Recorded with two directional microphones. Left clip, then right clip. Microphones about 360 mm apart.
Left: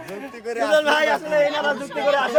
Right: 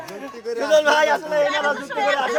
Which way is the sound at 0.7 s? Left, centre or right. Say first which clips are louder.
Right 2 dB; centre.